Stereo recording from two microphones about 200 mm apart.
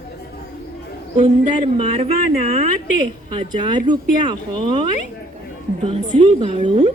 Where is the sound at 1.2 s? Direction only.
25° right (ahead or behind).